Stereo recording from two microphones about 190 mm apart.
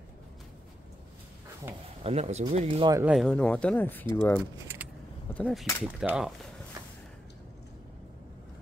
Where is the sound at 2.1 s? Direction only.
35° right (ahead or behind).